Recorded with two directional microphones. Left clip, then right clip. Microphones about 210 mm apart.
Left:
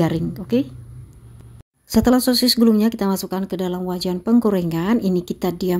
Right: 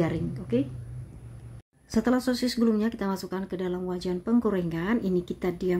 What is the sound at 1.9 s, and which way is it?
Speech, 35° left (ahead or behind).